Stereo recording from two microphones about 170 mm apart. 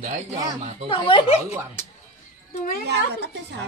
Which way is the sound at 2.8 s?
80° right.